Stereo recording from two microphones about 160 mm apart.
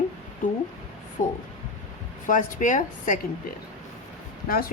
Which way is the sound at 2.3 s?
55° left (ahead or behind).